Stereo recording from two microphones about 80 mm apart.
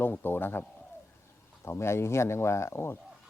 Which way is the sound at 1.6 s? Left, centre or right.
Left.